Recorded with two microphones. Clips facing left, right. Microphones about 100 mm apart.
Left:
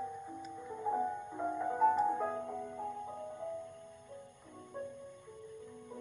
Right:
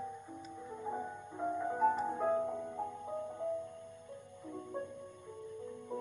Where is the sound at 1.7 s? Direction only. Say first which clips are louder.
Left 4 dB; 5° right (ahead or behind).